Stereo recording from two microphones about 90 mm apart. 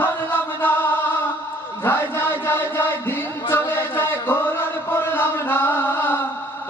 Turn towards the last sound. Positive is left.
turn(degrees=25)  # may be behind; listen again after turning